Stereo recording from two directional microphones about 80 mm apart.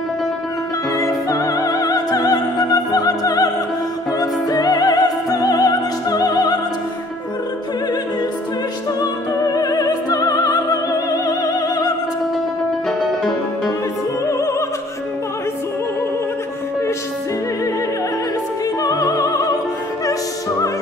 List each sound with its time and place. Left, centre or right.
0.9 s opera: left
4.2 s music: left
9.5 s opera: left
18.8 s music: left
20.1 s opera: left